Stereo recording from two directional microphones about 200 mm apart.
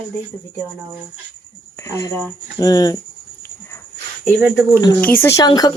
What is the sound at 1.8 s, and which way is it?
Speech, 15° left (ahead or behind).